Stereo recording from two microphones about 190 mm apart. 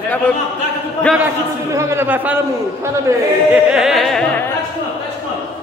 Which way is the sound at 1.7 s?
15° right (ahead or behind).